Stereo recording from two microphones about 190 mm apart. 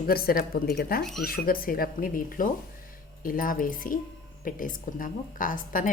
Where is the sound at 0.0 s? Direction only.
50° left (ahead or behind).